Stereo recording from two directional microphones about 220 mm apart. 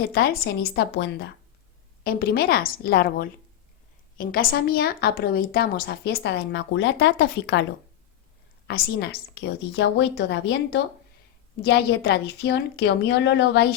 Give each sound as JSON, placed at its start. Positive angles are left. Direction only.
{"t": 0.1, "sound": "a woman's voice", "side_deg": 45}
{"t": 8.6, "sound": "a woman's voice", "side_deg": 50}